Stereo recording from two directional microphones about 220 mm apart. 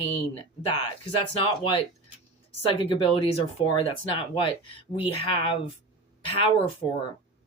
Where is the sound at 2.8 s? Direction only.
25° left (ahead or behind).